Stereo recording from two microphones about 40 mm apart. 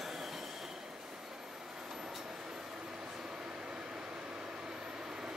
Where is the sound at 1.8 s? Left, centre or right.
Centre.